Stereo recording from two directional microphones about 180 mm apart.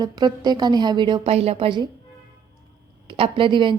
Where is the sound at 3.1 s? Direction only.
30° right (ahead or behind).